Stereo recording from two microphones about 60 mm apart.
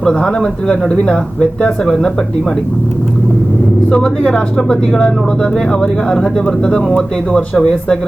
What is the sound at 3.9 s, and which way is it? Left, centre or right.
Speech, centre.